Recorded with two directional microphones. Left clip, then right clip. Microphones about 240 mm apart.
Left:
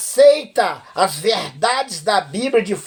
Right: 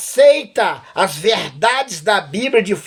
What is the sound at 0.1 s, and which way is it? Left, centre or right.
Speech, right.